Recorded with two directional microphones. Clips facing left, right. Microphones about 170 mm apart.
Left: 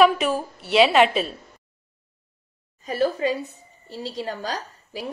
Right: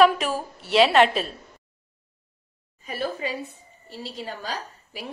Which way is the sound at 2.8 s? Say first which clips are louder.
Left 7 dB; 40° left (ahead or behind).